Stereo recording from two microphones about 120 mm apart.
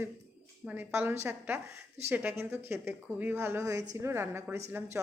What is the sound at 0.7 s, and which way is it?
A woman's voice, 15° right (ahead or behind).